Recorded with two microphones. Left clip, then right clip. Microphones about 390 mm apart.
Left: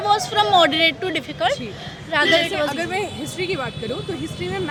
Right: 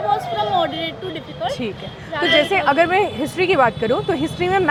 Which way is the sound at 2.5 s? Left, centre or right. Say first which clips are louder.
Right 7 dB; centre.